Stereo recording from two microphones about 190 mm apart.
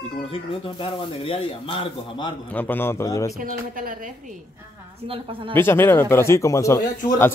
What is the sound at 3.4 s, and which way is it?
Speech, 45° right (ahead or behind).